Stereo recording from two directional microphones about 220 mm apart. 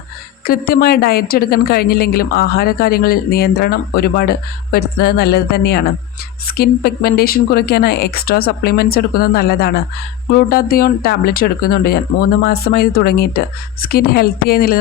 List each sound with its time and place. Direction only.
0.4 s a woman's voice: 40° left (ahead or behind)